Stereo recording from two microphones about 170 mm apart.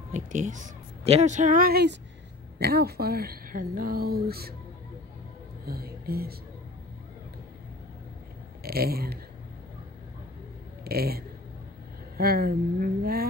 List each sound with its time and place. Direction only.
0.1 s a woman's voice: 45° right (ahead or behind); by 4.6 s 65° right (ahead or behind)
5.7 s a woman's voice: 65° right (ahead or behind)
8.6 s a woman's voice: 65° right (ahead or behind)
10.8 s a woman's voice: 65° right (ahead or behind)